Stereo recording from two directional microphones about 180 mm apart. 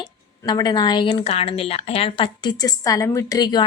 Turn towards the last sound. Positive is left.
turn(degrees=20)  # may be behind; listen again after turning